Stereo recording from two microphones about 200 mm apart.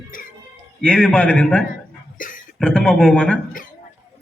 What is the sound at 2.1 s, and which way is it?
Speech, 40° left (ahead or behind).